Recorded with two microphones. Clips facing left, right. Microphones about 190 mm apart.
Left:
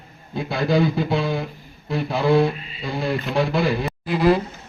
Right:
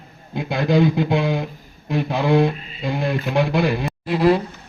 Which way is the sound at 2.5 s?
45° right (ahead or behind).